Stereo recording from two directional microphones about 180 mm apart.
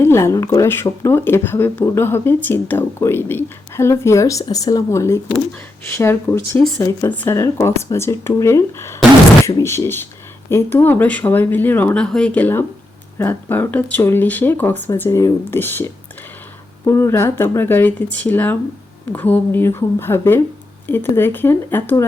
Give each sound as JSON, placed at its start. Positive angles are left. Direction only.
{"t": 0.0, "sound": "speech", "side_deg": 15}